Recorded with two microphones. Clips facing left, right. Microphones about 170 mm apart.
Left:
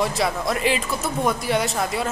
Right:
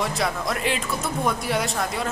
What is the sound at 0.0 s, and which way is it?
A woman's voice, centre (ahead or behind).